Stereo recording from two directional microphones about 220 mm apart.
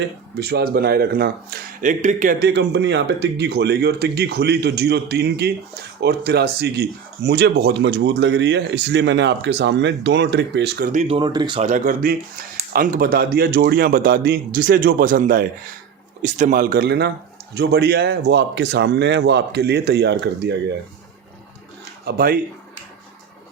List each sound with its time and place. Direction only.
0.3 s speech: 45° right (ahead or behind)
11.1 s speech: 20° right (ahead or behind)
11.6 s speech: 40° right (ahead or behind)
22.0 s speech: 45° right (ahead or behind)